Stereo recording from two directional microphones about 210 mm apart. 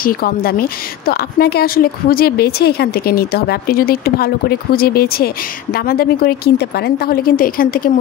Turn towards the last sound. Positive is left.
turn(degrees=45)  # may be behind; listen again after turning